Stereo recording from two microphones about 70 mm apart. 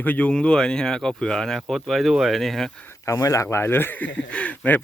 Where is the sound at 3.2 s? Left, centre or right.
Left.